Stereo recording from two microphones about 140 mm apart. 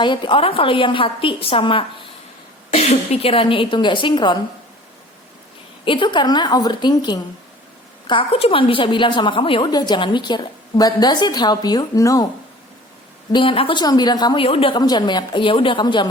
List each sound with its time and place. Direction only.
0.0 s a woman's voice: 35° left (ahead or behind)
2.7 s a woman's voice: 50° left (ahead or behind); by 4.4 s 35° left (ahead or behind)
5.8 s a woman's voice: 35° left (ahead or behind)
13.3 s a woman's voice: 40° left (ahead or behind)
14.4 s a woman's voice: 40° left (ahead or behind)